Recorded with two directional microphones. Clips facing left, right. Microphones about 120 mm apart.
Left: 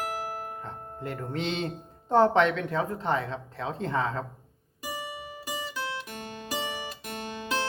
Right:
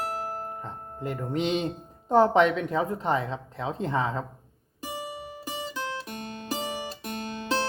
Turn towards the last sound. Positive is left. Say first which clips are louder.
# right 3 dB
turn(degrees=-30)  # may be behind; listen again after turning